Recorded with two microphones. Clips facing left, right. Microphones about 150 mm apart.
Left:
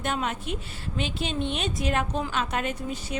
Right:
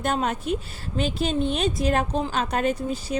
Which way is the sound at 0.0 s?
40° right (ahead or behind).